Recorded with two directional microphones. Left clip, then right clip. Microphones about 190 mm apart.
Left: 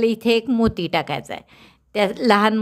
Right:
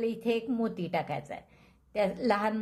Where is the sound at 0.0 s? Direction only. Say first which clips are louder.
Left 12 dB; 50° left (ahead or behind).